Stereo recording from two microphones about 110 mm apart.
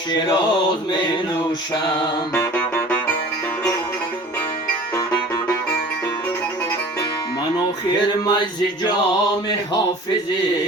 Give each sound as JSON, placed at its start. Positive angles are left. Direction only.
{"t": 2.3, "sound": "music", "side_deg": 15}
{"t": 8.0, "sound": "music", "side_deg": 45}